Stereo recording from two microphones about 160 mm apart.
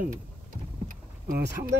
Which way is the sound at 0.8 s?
65° right (ahead or behind).